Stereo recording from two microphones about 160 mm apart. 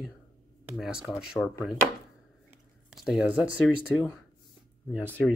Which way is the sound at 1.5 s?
20° left (ahead or behind).